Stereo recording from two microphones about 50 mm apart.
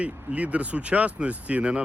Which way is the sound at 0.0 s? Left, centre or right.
Right.